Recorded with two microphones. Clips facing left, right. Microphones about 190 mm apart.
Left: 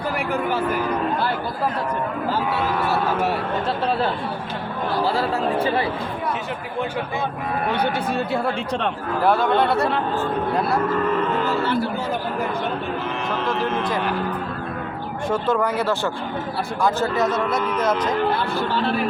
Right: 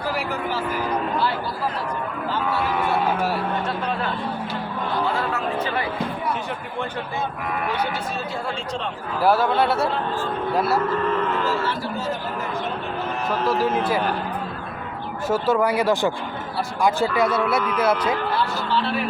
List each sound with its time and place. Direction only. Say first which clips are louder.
0.2 s speech: left 3 dB; 55° left (ahead or behind)
5.0 s speech: left 3 dB; 30° left (ahead or behind)
9.2 s speech: even; 5° right (ahead or behind)
13.4 s speech: right 3 dB; 5° right (ahead or behind)
15.3 s speech: right 1 dB; 5° right (ahead or behind)
18.5 s speech: left 1 dB; 45° left (ahead or behind)